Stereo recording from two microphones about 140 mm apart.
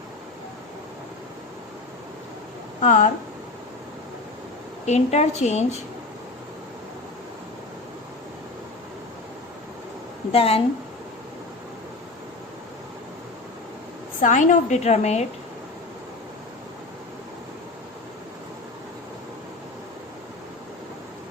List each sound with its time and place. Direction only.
2.8 s speech: 65° left (ahead or behind)
4.9 s a woman's voice: 55° left (ahead or behind)
10.3 s a woman's voice: 45° left (ahead or behind)
14.2 s a woman's voice: 65° left (ahead or behind)